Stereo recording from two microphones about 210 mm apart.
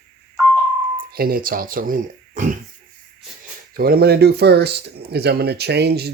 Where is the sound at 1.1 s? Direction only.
45° right (ahead or behind).